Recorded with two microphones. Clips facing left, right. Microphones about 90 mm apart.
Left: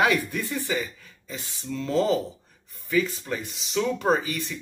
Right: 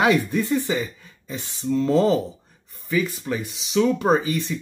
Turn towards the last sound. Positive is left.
turn(degrees=-25)  # may be behind; listen again after turning